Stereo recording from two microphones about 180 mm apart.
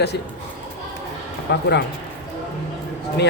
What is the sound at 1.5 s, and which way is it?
Speech, 70° left (ahead or behind).